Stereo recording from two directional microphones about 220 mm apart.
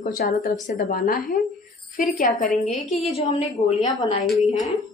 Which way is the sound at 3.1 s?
25° left (ahead or behind).